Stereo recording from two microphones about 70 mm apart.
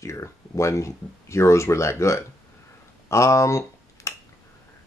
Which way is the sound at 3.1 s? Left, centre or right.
Left.